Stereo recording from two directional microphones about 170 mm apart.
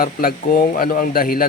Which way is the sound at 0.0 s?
60° left (ahead or behind).